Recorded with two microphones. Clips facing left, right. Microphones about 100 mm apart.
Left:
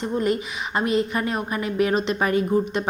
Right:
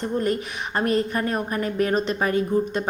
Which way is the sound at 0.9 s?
45° right (ahead or behind).